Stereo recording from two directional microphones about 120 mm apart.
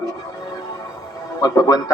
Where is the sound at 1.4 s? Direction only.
30° left (ahead or behind).